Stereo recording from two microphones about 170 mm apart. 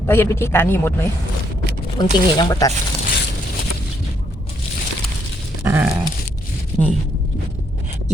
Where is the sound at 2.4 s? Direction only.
20° left (ahead or behind).